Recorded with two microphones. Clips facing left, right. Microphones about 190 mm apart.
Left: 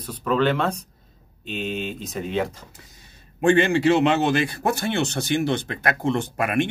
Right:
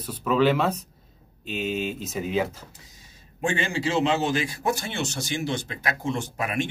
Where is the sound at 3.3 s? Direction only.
60° left (ahead or behind).